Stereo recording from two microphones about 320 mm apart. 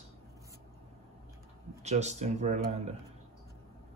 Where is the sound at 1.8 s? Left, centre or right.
Right.